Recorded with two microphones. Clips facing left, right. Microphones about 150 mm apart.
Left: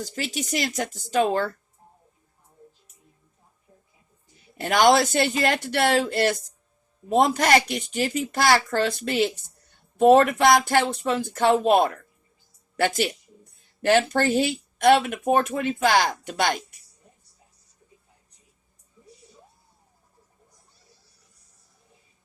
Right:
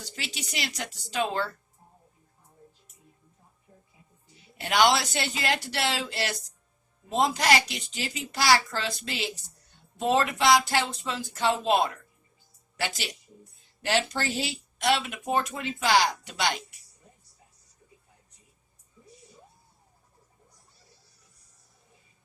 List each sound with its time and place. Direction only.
0.0 s speech: 45° left (ahead or behind)
4.5 s speech: 45° left (ahead or behind)